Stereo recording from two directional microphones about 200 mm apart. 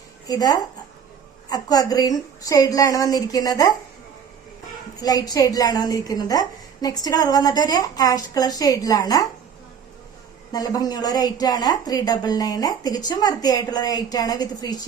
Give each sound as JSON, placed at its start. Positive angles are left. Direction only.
{"t": 0.3, "sound": "a woman's voice", "side_deg": 20}
{"t": 4.9, "sound": "a woman's voice", "side_deg": 20}
{"t": 10.5, "sound": "a woman's voice", "side_deg": 20}